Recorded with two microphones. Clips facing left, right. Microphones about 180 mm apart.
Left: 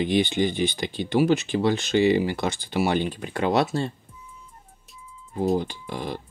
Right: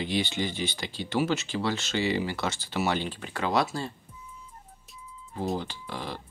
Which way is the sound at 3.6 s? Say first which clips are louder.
Left 5 dB; 70° left (ahead or behind).